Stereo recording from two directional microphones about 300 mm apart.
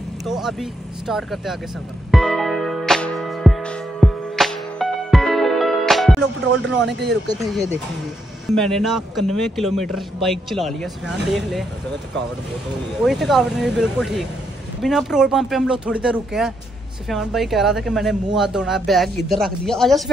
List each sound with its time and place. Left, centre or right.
0.3 s speech: centre
2.0 s music: centre
6.6 s speech: right
8.5 s speech: centre
13.0 s speech: centre